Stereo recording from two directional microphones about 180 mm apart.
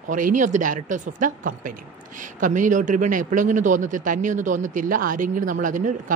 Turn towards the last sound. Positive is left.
turn(degrees=-45)  # may be behind; listen again after turning